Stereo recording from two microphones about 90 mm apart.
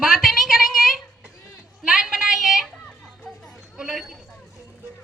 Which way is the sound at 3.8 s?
5° right (ahead or behind).